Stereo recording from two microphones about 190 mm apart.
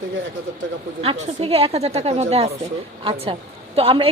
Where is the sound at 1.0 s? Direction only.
30° right (ahead or behind).